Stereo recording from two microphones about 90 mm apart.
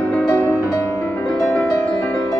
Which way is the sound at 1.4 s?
5° left (ahead or behind).